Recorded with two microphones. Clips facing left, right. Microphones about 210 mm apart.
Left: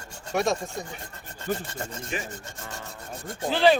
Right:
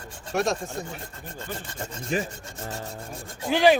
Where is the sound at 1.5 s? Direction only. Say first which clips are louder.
Left 8 dB; 50° left (ahead or behind).